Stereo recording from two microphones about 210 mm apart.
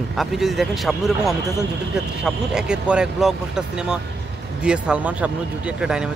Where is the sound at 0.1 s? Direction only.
Centre (ahead or behind).